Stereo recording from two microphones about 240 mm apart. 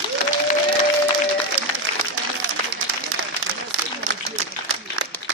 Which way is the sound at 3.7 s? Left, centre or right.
Right.